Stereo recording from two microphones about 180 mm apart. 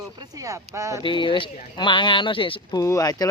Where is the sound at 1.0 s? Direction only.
25° left (ahead or behind).